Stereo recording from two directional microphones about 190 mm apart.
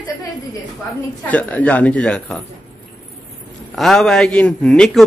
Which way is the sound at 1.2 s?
10° left (ahead or behind).